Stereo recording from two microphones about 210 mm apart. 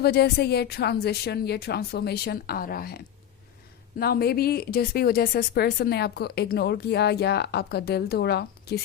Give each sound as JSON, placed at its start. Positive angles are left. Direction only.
{"t": 0.0, "sound": "speech", "side_deg": 50}